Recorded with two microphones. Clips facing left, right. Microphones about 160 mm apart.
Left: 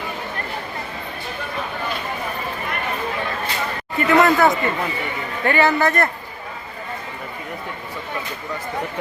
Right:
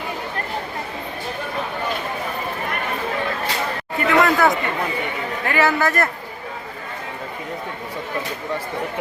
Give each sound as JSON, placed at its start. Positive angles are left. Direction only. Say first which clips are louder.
{"t": 3.9, "sound": "a man's voice", "louder": "left 2 dB", "side_deg": 0}